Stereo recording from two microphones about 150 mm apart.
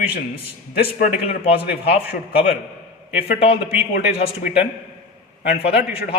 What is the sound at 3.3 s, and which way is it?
Speech, 40° left (ahead or behind).